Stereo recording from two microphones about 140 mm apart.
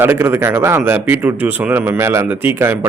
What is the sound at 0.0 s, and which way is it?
Speech, 15° right (ahead or behind).